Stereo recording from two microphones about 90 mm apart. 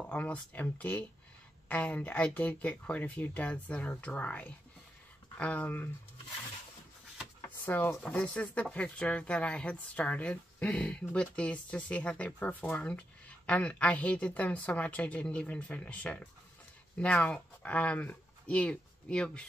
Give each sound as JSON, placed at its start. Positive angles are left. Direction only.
{"t": 0.0, "sound": "speech", "side_deg": 15}
{"t": 7.4, "sound": "a sound", "side_deg": 20}
{"t": 8.0, "sound": "speech", "side_deg": 10}